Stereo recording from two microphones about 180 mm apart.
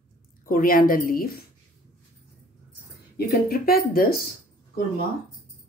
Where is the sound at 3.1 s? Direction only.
60° left (ahead or behind).